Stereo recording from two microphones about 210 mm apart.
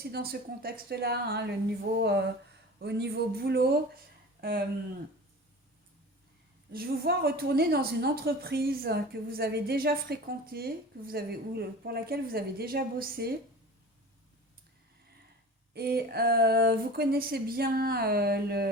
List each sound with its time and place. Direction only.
0.0 s a woman's voice: 45° right (ahead or behind)
4.4 s a sound: 45° right (ahead or behind)
6.7 s a woman's voice: 50° right (ahead or behind)
15.7 s a woman's voice: 45° right (ahead or behind)